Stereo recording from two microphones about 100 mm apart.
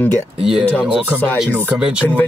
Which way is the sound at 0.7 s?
15° left (ahead or behind).